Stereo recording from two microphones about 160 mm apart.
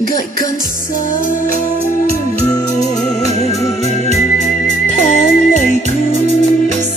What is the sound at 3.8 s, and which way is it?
Organ, 45° left (ahead or behind).